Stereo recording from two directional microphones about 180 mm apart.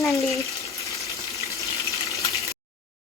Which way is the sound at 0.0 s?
15° left (ahead or behind).